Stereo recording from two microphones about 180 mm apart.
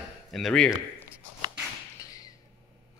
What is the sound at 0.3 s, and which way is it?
Speech, centre (ahead or behind).